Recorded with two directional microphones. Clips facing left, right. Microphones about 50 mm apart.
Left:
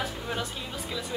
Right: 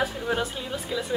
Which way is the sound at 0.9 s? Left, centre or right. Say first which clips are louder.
Right 6 dB; centre.